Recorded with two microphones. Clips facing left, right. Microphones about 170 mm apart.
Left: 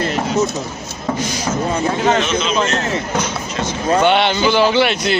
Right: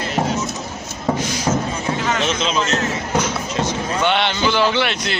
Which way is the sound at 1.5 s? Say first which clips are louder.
Left 3 dB; 20° right (ahead or behind).